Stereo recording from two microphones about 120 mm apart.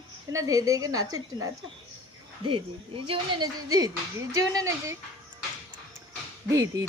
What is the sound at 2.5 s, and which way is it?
Speech, 50° right (ahead or behind).